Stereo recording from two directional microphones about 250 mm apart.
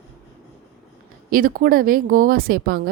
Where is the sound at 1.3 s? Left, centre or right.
Right.